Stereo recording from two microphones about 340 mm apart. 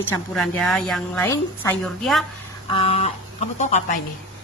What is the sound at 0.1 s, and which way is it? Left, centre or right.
A woman's voice, centre.